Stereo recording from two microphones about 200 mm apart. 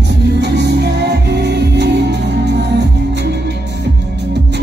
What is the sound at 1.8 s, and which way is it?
Music, 60° right (ahead or behind).